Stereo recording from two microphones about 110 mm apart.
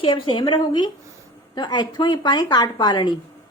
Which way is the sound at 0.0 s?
50° left (ahead or behind).